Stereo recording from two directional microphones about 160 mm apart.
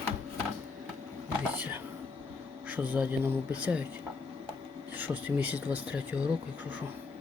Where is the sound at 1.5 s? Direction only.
10° right (ahead or behind).